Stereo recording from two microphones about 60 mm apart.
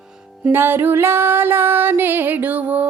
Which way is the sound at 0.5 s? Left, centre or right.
Right.